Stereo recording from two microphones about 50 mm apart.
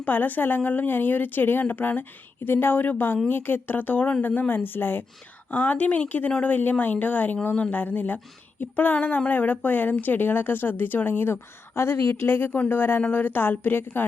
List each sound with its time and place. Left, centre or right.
0.0 s a woman's voice: left
12.5 s speech: left
12.7 s a woman's voice: left